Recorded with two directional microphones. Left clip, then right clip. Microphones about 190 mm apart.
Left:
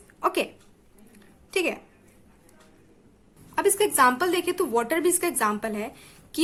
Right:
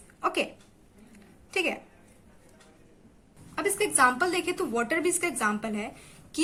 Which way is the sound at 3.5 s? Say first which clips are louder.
Left 5 dB; 30° left (ahead or behind).